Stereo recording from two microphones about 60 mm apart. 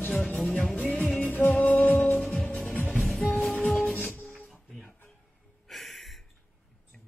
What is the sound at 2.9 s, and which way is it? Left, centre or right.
Music, centre.